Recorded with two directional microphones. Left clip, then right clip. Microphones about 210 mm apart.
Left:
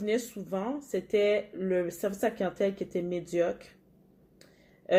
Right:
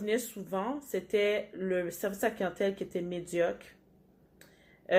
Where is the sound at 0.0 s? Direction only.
20° left (ahead or behind).